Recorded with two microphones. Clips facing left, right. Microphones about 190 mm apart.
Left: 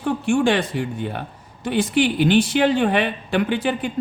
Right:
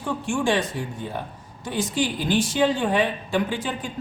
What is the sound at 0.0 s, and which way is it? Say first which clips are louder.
A man's voice: left 6 dB; 65° left (ahead or behind).